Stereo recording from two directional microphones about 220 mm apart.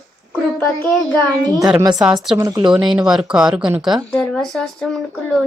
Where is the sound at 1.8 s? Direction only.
5° right (ahead or behind).